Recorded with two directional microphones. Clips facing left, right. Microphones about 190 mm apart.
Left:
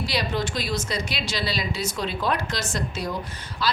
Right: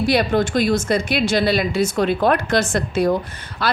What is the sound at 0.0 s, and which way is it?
Speech, 55° right (ahead or behind).